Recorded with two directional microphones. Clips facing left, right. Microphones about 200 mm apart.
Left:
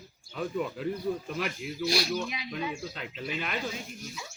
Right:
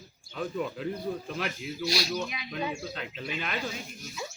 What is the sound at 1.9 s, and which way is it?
Speech, 55° left (ahead or behind).